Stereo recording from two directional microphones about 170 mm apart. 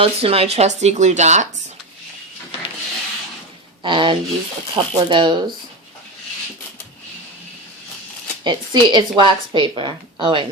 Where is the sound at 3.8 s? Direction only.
30° right (ahead or behind).